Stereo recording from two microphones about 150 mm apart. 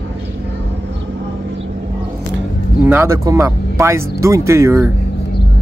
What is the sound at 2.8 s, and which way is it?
Speech, 15° right (ahead or behind).